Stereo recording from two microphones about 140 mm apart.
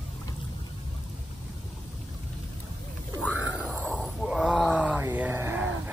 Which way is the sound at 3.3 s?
10° right (ahead or behind).